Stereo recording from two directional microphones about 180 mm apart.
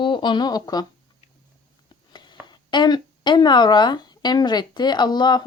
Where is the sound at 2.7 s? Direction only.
25° left (ahead or behind).